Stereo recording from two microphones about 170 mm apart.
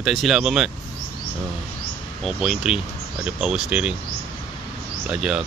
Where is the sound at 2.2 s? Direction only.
Centre (ahead or behind).